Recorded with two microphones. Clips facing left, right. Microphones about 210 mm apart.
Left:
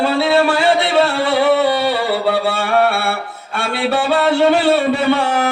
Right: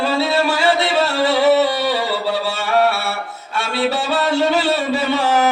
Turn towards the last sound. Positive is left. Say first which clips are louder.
# left 1 dB
turn(degrees=55)  # may be behind; listen again after turning